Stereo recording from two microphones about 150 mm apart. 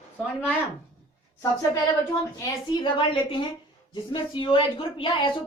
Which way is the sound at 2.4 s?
35° left (ahead or behind).